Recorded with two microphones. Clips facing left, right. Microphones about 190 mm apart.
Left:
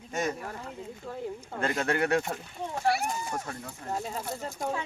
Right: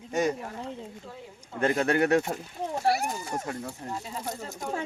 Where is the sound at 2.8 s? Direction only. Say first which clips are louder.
Right 1 dB; 40° right (ahead or behind).